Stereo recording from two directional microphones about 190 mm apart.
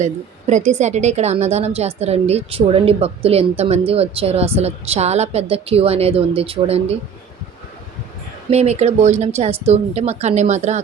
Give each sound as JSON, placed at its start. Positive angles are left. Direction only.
{"t": 0.0, "sound": "a woman's voice", "side_deg": -40}
{"t": 8.4, "sound": "a woman's voice", "side_deg": -35}